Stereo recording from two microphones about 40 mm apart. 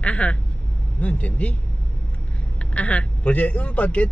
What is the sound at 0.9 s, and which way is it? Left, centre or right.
Speech, left.